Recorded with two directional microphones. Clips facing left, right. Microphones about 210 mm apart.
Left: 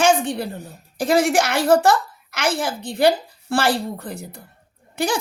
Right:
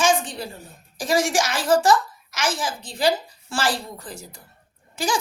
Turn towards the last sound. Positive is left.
turn(degrees=60)  # may be behind; listen again after turning